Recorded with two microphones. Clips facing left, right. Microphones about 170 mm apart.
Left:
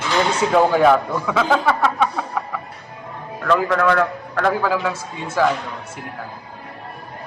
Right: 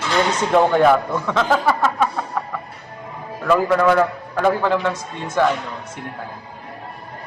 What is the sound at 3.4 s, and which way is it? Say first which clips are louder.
A man's voice: right 2 dB; 5° right (ahead or behind).